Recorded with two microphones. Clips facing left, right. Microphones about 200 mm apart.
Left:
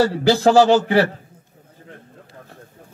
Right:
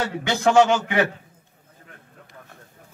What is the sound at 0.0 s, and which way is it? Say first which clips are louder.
A man's voice: left 7 dB; 35° left (ahead or behind).